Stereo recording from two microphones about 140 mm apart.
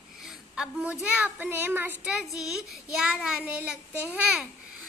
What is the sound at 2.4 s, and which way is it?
Child singing, 5° right (ahead or behind).